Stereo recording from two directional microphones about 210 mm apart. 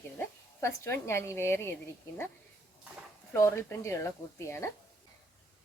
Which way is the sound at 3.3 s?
15° left (ahead or behind).